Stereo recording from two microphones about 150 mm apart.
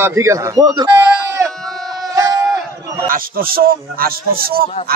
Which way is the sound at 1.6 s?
Centre (ahead or behind).